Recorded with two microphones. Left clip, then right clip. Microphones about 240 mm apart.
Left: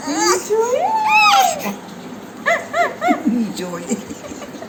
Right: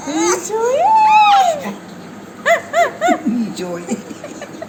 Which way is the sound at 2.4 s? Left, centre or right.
Right.